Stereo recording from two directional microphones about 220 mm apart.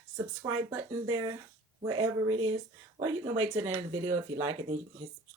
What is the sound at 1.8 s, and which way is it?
Speech, 15° right (ahead or behind).